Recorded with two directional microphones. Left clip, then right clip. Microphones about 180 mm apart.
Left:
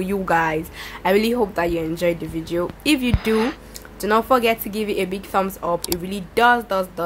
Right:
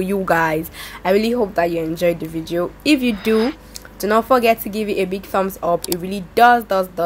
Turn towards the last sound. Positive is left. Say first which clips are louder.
# right 4 dB
turn(degrees=-20)  # may be behind; listen again after turning